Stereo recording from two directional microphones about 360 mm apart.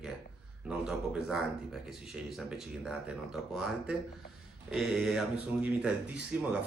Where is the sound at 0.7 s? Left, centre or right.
Centre.